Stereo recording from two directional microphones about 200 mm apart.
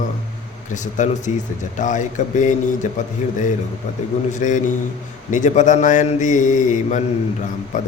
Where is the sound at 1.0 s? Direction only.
35° left (ahead or behind).